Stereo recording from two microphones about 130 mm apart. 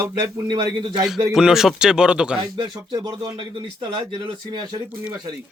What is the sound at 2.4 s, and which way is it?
Speech, 35° right (ahead or behind).